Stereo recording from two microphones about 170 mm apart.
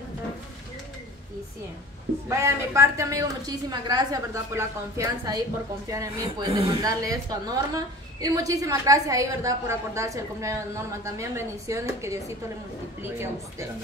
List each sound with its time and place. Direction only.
2.2 s a woman's voice: 15° right (ahead or behind)